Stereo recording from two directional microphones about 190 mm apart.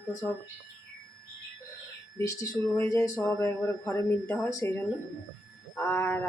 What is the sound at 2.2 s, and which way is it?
Speech, 15° left (ahead or behind).